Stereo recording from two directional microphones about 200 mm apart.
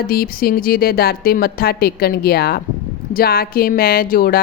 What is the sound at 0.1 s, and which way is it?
Speech, 50° left (ahead or behind).